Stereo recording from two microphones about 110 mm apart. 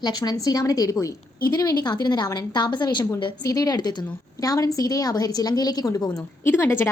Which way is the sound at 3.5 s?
35° left (ahead or behind).